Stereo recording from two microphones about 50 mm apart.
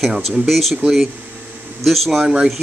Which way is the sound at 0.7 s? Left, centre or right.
Centre.